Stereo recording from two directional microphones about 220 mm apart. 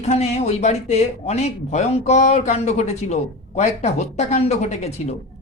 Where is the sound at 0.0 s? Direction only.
30° left (ahead or behind).